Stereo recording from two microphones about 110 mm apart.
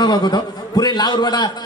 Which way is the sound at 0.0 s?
40° left (ahead or behind).